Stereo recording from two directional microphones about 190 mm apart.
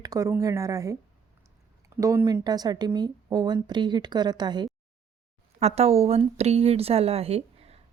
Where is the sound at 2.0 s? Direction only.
15° right (ahead or behind).